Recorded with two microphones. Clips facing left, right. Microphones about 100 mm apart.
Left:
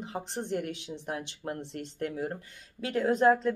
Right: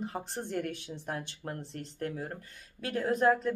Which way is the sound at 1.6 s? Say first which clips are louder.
Left 3 dB; 80° left.